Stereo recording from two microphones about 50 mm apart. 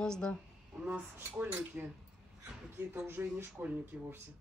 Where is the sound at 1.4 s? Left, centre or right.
Right.